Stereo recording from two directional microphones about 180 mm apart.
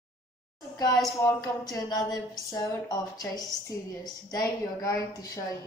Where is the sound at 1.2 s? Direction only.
20° left (ahead or behind).